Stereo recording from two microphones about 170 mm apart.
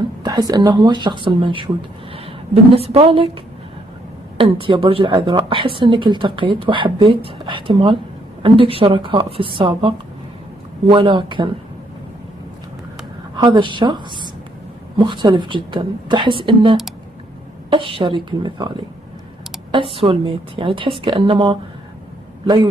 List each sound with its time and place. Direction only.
0.2 s a woman's voice: 25° right (ahead or behind)
4.4 s a woman's voice: 30° right (ahead or behind)
13.4 s a woman's voice: 30° right (ahead or behind)
19.7 s a woman's voice: 30° right (ahead or behind)